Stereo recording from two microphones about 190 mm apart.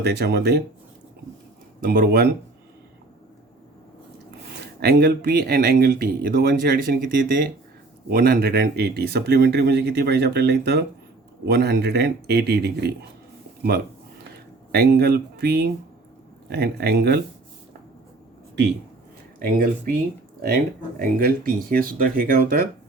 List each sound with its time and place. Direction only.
0.0 s speech: 60° right (ahead or behind)
1.8 s speech: 50° right (ahead or behind)
4.6 s speech: 55° right (ahead or behind)
14.7 s speech: 55° right (ahead or behind)
19.5 s speech: 50° right (ahead or behind)
21.0 s speech: 50° right (ahead or behind)